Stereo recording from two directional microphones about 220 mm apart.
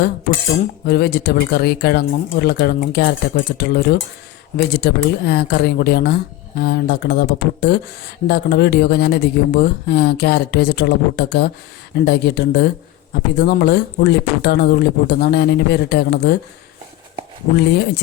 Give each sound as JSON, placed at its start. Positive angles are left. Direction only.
{"t": 0.9, "sound": "speech", "side_deg": 45}
{"t": 17.6, "sound": "speech", "side_deg": 50}